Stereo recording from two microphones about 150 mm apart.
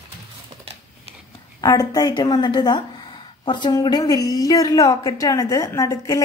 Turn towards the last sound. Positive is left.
turn(degrees=25)  # may be behind; listen again after turning